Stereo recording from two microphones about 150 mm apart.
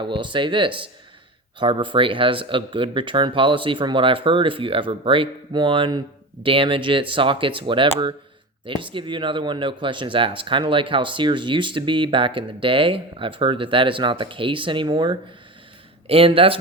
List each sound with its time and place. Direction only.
0.0 s speech: 35° right (ahead or behind)